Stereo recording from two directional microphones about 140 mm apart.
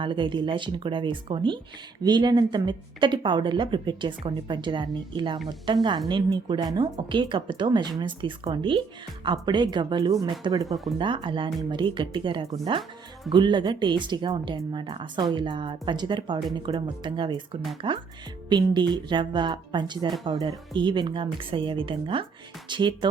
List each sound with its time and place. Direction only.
0.0 s speech: 35° right (ahead or behind)